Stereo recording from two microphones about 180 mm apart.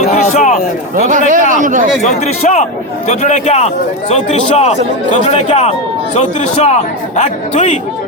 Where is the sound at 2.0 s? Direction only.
40° left (ahead or behind).